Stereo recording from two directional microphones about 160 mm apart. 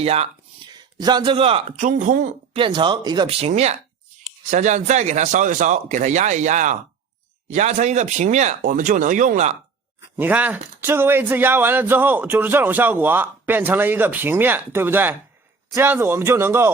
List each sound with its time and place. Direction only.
0.0 s speech: 40° right (ahead or behind)
0.7 s speech: 25° right (ahead or behind); by 2.3 s 55° right (ahead or behind)
2.5 s speech: 35° right (ahead or behind); by 9.6 s 50° right (ahead or behind)
10.2 s speech: 10° right (ahead or behind)